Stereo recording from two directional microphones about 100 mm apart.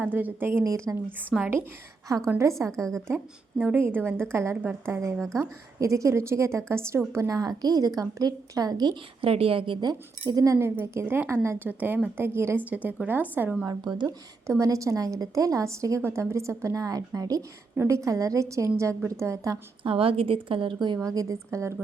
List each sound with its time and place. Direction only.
0.0 s speech: 20° right (ahead or behind)
0.6 s a woman's voice: 35° right (ahead or behind)
2.0 s a woman's voice: 35° right (ahead or behind)
2.7 s a woman's voice: 5° left (ahead or behind)
3.6 s a woman's voice: 20° right (ahead or behind); by 9.0 s 40° right (ahead or behind)
9.2 s a woman's voice: 70° right (ahead or behind)
9.8 s speech: 40° right (ahead or behind); by 13.7 s 20° right (ahead or behind)
13.7 s a woman's voice: 45° right (ahead or behind)
14.4 s a woman's voice: 30° right (ahead or behind)
19.8 s a woman's voice: 70° right (ahead or behind); by 21.8 s 30° right (ahead or behind)